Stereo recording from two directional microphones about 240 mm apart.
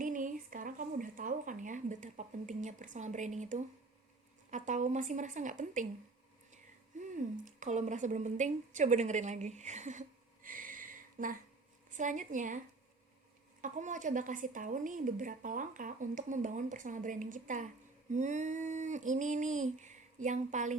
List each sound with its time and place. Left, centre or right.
0.0 s a woman's voice: right
7.3 s a woman's voice: right
13.6 s speech: right